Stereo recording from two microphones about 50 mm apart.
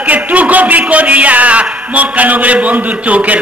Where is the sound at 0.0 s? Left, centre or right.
Right.